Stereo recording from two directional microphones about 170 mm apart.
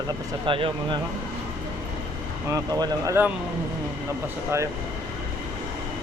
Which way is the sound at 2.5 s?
25° right (ahead or behind).